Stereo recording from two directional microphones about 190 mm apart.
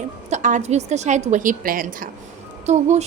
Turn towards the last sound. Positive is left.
turn(degrees=-35)  # may be behind; listen again after turning